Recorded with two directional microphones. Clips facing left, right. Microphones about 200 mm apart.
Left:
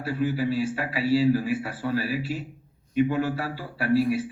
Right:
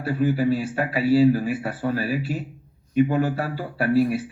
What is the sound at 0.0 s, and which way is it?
A man's voice, 45° right (ahead or behind).